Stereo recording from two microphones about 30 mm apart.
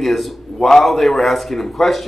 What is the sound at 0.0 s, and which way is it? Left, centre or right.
A man's voice, centre.